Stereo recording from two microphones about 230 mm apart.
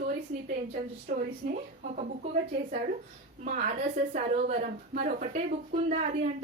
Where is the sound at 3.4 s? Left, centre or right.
Right.